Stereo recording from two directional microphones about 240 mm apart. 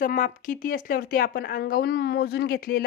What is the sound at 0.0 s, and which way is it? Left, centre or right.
Speech, left.